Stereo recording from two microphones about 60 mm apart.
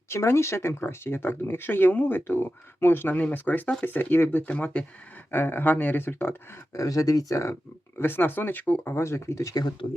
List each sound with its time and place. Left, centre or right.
0.1 s speech: left
4.4 s speech: left
5.3 s speech: left
6.7 s speech: left
7.9 s speech: left
9.0 s speech: left